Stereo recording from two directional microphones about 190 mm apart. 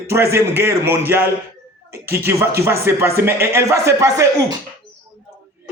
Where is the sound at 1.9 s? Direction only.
55° right (ahead or behind).